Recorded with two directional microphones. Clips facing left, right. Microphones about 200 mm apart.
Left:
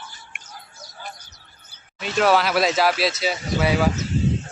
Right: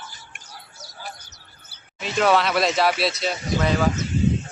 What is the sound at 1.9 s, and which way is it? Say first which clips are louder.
Speech: left 1 dB; centre (ahead or behind).